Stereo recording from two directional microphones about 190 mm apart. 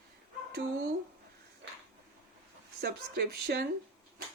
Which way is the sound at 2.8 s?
55° right (ahead or behind).